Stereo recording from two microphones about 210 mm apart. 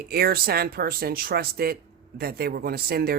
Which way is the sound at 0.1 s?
45° right (ahead or behind).